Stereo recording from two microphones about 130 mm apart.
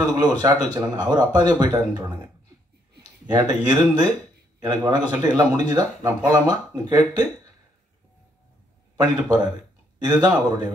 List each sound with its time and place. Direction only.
0.0 s speech: 30° right (ahead or behind)
3.3 s a man's voice: 30° right (ahead or behind)
8.9 s speech: 30° right (ahead or behind)